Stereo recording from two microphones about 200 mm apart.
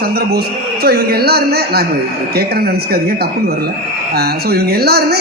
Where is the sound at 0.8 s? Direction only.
50° right (ahead or behind).